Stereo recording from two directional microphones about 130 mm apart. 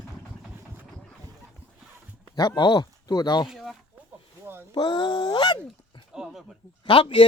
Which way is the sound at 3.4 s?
Centre (ahead or behind).